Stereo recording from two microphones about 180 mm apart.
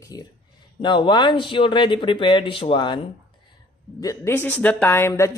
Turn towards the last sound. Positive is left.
turn(degrees=15)  # may be behind; listen again after turning